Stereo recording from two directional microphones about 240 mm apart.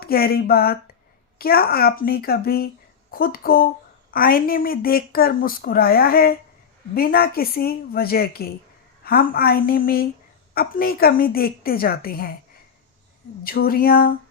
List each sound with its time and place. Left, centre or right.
0.0 s speech: left
13.4 s speech: left